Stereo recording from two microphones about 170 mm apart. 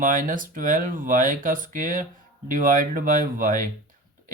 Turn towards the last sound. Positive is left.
turn(degrees=-50)  # may be behind; listen again after turning